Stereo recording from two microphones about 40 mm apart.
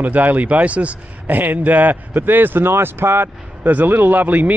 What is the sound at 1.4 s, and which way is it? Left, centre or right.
Speech, right.